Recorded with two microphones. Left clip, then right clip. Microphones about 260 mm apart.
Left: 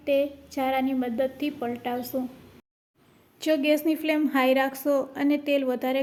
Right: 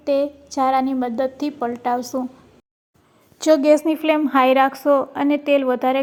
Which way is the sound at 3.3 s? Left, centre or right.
Centre.